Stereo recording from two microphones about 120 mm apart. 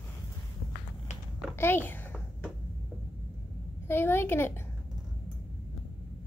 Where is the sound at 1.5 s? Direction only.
20° left (ahead or behind).